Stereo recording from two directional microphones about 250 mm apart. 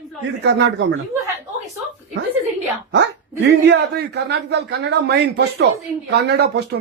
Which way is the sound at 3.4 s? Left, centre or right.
Right.